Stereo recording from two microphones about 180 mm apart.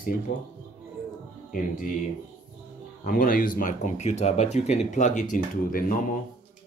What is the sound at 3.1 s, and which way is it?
Speech, 55° left (ahead or behind).